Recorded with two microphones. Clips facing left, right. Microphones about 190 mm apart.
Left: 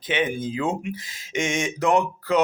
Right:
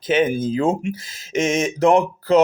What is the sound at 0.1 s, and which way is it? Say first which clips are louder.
Speech: right 7 dB; 45° right (ahead or behind).